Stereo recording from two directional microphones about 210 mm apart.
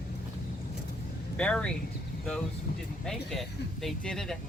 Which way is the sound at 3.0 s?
Centre (ahead or behind).